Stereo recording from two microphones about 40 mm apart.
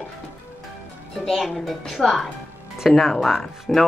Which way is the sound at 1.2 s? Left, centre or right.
Centre.